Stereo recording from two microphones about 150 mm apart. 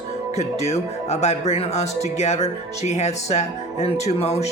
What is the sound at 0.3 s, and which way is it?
Speech, 45° left (ahead or behind).